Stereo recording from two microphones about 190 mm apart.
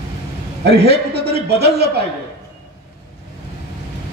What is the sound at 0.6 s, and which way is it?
A man's voice, 60° right (ahead or behind).